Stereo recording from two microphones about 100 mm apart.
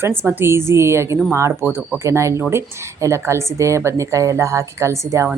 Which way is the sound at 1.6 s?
20° right (ahead or behind).